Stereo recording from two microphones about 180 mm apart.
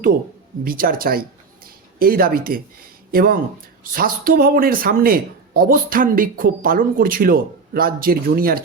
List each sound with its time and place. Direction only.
0.6 s speech: 55° right (ahead or behind)
1.6 s a sound: 55° right (ahead or behind)
3.1 s speech: 55° right (ahead or behind)